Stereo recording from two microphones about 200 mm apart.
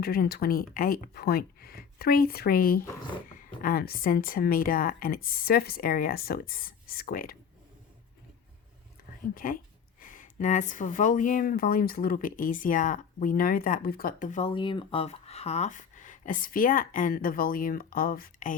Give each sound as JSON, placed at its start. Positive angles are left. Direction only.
{"t": 0.0, "sound": "a woman's voice", "side_deg": 50}
{"t": 9.3, "sound": "a woman's voice", "side_deg": 45}
{"t": 14.5, "sound": "speech", "side_deg": 25}